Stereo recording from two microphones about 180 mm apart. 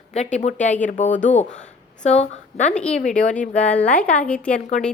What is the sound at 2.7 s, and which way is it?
Speech, 5° left (ahead or behind).